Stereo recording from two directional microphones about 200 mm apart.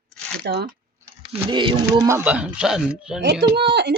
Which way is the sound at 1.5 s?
25° right (ahead or behind).